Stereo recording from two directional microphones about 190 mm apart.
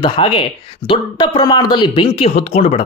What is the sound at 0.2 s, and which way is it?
Speech, 30° left (ahead or behind).